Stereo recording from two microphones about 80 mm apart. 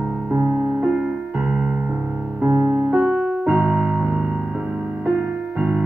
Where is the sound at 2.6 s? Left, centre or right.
Right.